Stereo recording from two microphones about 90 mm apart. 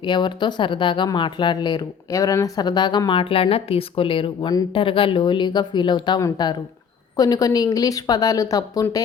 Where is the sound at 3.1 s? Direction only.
80° left; by 6.2 s 55° left (ahead or behind).